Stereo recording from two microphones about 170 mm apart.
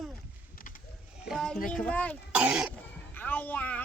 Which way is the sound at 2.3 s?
5° right (ahead or behind).